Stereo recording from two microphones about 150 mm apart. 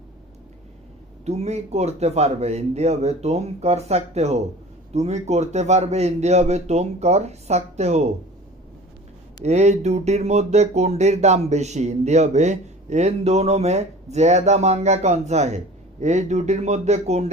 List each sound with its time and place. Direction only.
1.2 s speech: 45° right (ahead or behind)
9.4 s speech: 45° right (ahead or behind)